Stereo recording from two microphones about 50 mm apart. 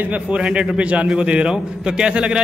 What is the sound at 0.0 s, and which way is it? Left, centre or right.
A man's voice, right.